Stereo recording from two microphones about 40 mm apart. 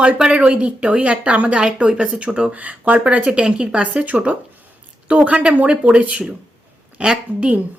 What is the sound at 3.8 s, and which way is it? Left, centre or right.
Speech, right.